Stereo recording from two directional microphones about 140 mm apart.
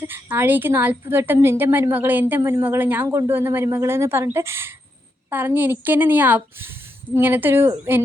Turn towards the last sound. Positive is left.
turn(degrees=-15)  # may be behind; listen again after turning